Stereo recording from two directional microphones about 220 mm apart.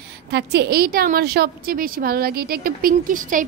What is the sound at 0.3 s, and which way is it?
A woman's voice, 50° right (ahead or behind).